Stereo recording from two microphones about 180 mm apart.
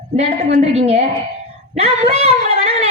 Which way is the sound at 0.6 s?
35° right (ahead or behind).